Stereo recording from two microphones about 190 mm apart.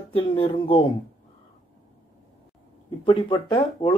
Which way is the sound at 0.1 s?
30° left (ahead or behind).